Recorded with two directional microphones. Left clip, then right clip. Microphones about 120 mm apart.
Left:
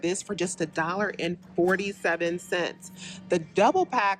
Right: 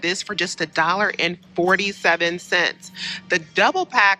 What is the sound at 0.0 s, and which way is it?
Speech, 25° left (ahead or behind).